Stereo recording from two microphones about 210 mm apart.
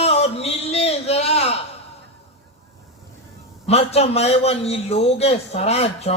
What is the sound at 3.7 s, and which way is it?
Speech, 30° left (ahead or behind).